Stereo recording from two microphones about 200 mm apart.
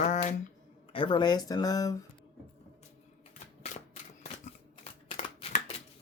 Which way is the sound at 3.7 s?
35° left (ahead or behind).